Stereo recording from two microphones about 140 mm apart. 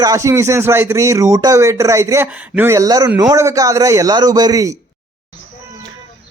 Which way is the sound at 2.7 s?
25° right (ahead or behind).